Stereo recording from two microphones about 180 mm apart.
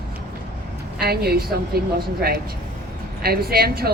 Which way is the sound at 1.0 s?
60° right (ahead or behind).